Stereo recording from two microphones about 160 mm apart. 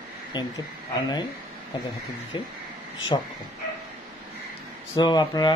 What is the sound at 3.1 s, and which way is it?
Speech, 35° left (ahead or behind).